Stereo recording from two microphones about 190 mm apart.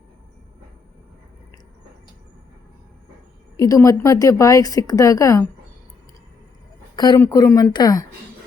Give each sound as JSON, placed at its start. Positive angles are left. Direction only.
{"t": 3.6, "sound": "a woman's voice", "side_deg": 20}
{"t": 6.9, "sound": "a woman's voice", "side_deg": 20}